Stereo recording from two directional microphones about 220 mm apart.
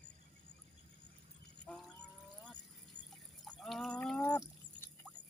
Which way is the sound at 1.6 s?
5° left (ahead or behind).